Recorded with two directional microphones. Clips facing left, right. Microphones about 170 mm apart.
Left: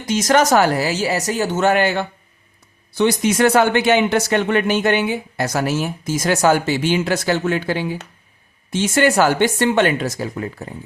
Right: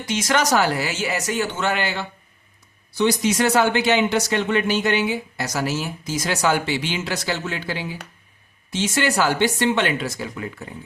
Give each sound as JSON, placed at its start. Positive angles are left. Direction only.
{"t": 0.1, "sound": "speech", "side_deg": 45}